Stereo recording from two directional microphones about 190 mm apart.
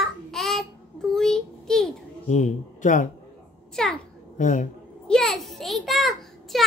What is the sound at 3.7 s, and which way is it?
Speech, 5° left (ahead or behind).